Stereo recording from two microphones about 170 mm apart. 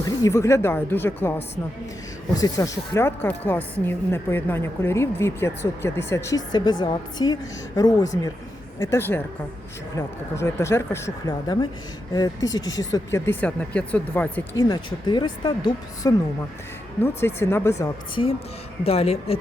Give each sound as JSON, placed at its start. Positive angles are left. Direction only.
{"t": 0.0, "sound": "a woman's voice", "side_deg": 20}
{"t": 14.5, "sound": "speech", "side_deg": 25}
{"t": 17.0, "sound": "a woman's voice", "side_deg": 15}
{"t": 18.1, "sound": "speech", "side_deg": 30}